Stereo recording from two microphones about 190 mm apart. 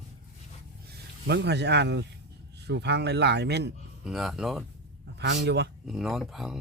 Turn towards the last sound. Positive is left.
turn(degrees=0)  # may be behind; listen again after turning